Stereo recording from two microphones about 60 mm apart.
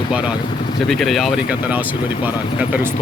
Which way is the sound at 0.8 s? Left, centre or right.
Centre.